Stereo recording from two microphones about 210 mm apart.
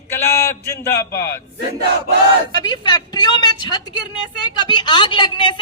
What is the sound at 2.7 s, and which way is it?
A woman's voice, 20° left (ahead or behind).